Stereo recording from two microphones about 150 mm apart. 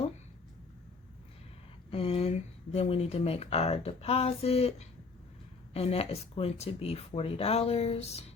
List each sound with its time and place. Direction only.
1.9 s speech: 40° left (ahead or behind)